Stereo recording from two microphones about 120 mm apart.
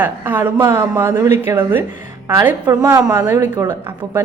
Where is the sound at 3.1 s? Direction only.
15° right (ahead or behind).